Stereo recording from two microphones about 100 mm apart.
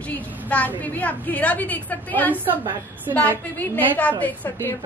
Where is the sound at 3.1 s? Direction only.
30° right (ahead or behind).